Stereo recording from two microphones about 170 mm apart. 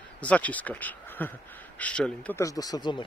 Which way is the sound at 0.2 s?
10° left (ahead or behind).